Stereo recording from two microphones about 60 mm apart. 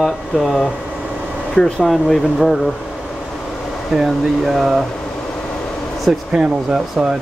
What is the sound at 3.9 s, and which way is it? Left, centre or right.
Speech, centre.